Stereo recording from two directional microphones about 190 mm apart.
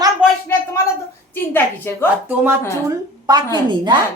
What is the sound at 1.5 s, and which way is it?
Speech, 10° left (ahead or behind).